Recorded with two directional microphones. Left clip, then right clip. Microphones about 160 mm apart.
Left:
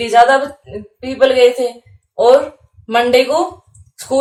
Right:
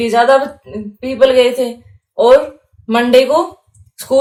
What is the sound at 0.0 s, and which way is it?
A woman's voice, 40° right (ahead or behind).